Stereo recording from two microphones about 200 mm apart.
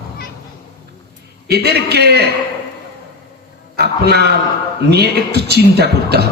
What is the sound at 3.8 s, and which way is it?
Speech, 55° right (ahead or behind).